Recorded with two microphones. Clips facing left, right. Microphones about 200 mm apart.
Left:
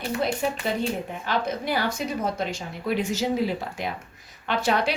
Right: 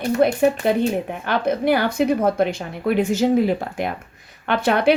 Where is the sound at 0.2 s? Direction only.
55° right (ahead or behind).